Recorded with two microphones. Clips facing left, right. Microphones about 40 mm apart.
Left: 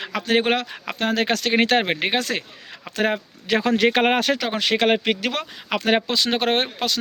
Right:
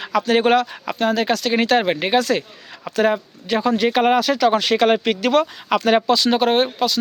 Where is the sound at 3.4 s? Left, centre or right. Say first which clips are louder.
Even; left.